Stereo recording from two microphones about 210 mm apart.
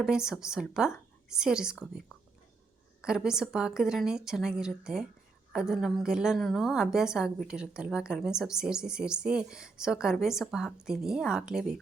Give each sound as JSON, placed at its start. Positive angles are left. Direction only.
{"t": 0.0, "sound": "a woman's voice", "side_deg": -5}
{"t": 3.0, "sound": "a woman's voice", "side_deg": -5}